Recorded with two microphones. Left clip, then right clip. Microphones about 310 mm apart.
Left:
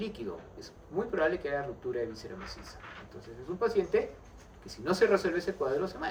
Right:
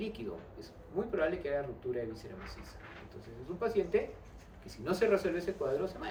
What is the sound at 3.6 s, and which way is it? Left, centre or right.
A man's voice, left.